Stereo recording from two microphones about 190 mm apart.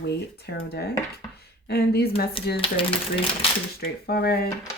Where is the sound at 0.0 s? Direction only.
60° left (ahead or behind).